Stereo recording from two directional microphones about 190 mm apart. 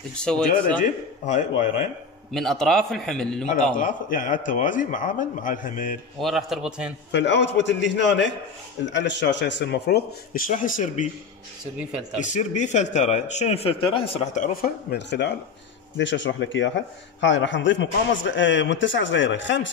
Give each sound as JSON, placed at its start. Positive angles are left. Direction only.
{"t": 0.2, "sound": "a man's voice", "side_deg": 5}
{"t": 0.7, "sound": "a man's voice", "side_deg": 40}
{"t": 2.3, "sound": "a man's voice", "side_deg": 0}
{"t": 3.7, "sound": "a man's voice", "side_deg": 45}
{"t": 6.1, "sound": "a man's voice", "side_deg": 0}
{"t": 7.1, "sound": "a man's voice", "side_deg": 65}
{"t": 12.2, "sound": "a man's voice", "side_deg": 40}
{"t": 14.9, "sound": "a man's voice", "side_deg": 65}